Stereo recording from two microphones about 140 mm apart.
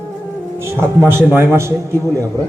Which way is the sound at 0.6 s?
20° right (ahead or behind).